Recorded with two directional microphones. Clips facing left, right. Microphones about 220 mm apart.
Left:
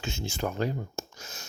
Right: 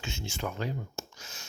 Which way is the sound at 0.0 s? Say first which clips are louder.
Left 4 dB; 35° left (ahead or behind).